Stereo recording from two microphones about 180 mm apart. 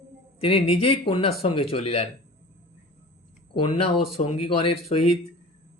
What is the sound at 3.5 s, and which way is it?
Speech, 30° left (ahead or behind).